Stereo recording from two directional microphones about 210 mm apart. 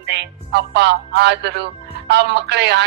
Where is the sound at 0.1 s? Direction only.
55° right (ahead or behind).